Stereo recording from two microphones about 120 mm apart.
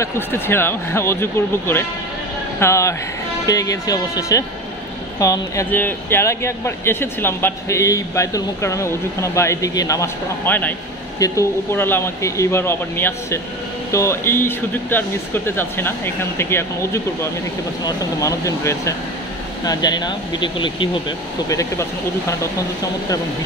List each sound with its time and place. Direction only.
0.0 s speech: 20° left (ahead or behind)
5.7 s speech: 15° left (ahead or behind)
11.1 s speech: 25° left (ahead or behind)
21.5 s speech: 30° left (ahead or behind)